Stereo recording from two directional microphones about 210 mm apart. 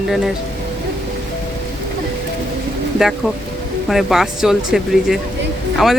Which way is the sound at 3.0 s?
Centre (ahead or behind).